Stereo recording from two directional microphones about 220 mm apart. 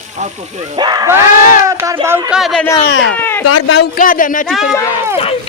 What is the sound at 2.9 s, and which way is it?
Speech, 60° left (ahead or behind).